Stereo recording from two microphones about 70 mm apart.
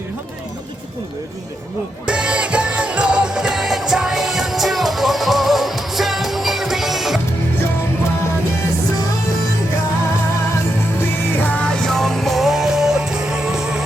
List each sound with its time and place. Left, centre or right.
2.0 s music: centre
11.4 s music: centre
11.8 s music: centre